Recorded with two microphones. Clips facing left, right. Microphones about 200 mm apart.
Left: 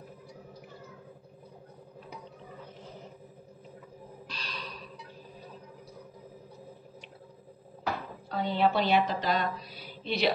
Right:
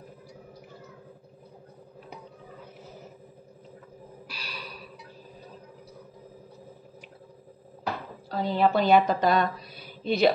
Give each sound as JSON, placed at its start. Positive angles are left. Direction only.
{"t": 4.3, "sound": "gasp", "side_deg": -10}
{"t": 8.3, "sound": "a woman's voice", "side_deg": -40}